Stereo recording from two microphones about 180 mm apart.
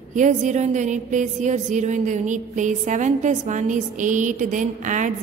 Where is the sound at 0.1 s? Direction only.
45° right (ahead or behind).